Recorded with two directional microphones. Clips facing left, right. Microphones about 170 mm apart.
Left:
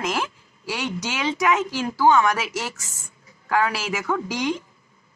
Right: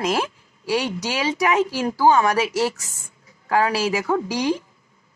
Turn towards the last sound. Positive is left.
turn(degrees=-30)  # may be behind; listen again after turning